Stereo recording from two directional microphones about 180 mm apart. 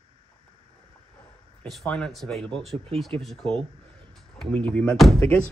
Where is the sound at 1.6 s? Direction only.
5° left (ahead or behind).